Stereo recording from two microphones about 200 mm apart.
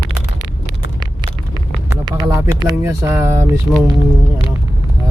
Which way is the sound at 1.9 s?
20° right (ahead or behind).